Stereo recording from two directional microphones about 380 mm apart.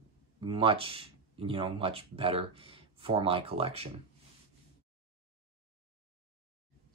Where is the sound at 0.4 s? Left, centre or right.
Centre.